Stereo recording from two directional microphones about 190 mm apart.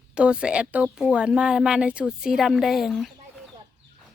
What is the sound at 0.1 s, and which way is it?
Speech, 5° right (ahead or behind).